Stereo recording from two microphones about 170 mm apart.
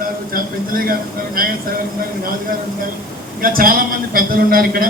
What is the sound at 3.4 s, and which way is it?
Speech, 55° right (ahead or behind).